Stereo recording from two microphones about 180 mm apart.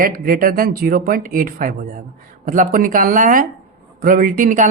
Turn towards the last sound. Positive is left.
turn(degrees=-45)  # may be behind; listen again after turning